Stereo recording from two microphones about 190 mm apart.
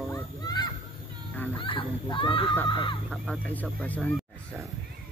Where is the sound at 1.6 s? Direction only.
25° left (ahead or behind).